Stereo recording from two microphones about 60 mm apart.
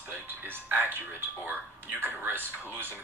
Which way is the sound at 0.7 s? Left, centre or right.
Right.